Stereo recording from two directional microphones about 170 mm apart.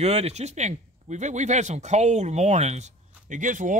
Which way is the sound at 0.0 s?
40° right (ahead or behind).